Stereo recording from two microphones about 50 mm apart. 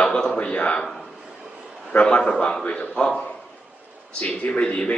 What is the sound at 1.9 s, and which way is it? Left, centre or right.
A man's voice, centre.